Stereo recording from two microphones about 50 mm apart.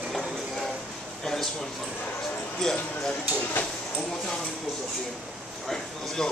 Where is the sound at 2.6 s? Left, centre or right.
Centre.